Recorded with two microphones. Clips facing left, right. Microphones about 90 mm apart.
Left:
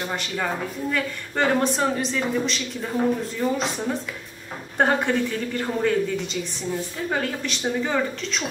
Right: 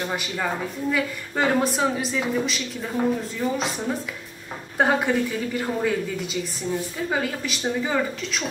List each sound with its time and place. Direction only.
0.0 s a woman's voice: 5° right (ahead or behind)